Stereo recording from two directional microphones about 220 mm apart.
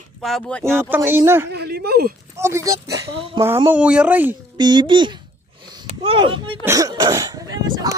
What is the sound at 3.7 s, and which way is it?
Speech, 5° right (ahead or behind).